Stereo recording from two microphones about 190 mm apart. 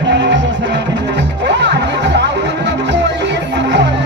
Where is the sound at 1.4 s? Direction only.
65° right (ahead or behind).